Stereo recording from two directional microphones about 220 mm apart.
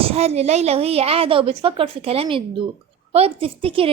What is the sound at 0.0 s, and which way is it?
A woman's voice, 30° right (ahead or behind).